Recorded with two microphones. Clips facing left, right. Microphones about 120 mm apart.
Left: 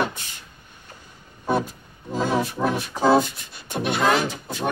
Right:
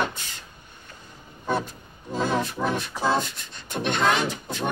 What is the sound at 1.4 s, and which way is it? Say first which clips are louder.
Music: left 3 dB; 10° left (ahead or behind).